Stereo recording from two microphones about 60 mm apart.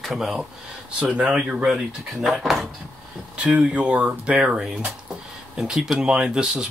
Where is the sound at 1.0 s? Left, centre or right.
Centre.